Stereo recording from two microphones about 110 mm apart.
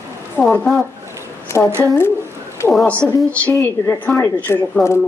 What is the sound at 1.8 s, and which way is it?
A woman's voice, 20° left (ahead or behind).